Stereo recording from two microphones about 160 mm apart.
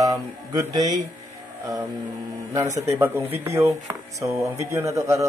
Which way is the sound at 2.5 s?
20° right (ahead or behind).